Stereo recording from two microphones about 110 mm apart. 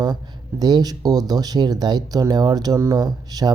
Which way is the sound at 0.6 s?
40° right (ahead or behind).